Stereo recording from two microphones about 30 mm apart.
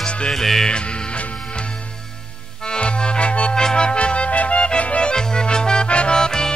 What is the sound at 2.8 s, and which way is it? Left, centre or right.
Music, left.